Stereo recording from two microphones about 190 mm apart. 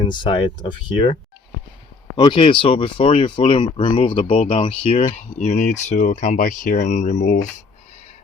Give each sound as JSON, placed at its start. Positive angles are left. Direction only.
{"t": 0.0, "sound": "speech", "side_deg": 25}